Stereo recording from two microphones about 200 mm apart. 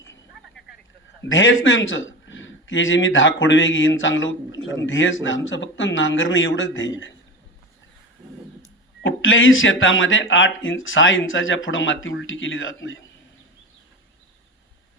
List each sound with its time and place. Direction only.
1.3 s a man's voice: 70° left (ahead or behind)
9.0 s a man's voice: 75° left (ahead or behind)